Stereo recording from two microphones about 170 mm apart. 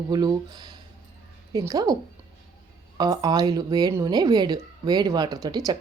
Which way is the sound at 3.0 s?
25° right (ahead or behind).